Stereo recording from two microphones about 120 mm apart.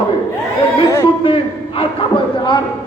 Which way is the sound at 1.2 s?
50° left (ahead or behind).